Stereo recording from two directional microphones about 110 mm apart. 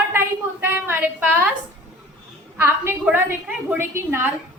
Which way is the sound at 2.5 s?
20° right (ahead or behind).